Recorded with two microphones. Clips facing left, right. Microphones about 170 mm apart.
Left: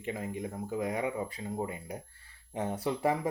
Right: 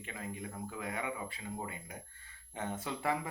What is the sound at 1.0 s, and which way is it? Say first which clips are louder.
Speech: left 6 dB; 35° left (ahead or behind).